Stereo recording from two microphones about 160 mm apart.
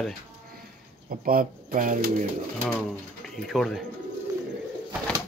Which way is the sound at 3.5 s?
Centre (ahead or behind).